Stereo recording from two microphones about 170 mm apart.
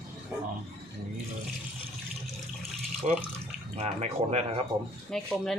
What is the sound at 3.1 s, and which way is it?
Speech, 45° right (ahead or behind).